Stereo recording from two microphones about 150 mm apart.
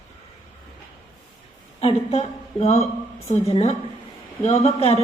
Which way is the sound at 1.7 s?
45° left (ahead or behind).